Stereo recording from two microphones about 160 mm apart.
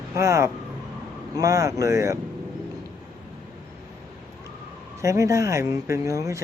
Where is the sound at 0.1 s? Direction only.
20° right (ahead or behind).